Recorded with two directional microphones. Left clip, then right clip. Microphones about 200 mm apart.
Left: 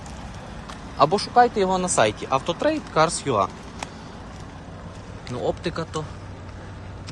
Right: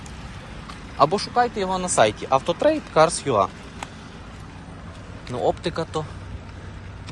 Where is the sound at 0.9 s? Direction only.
20° left (ahead or behind).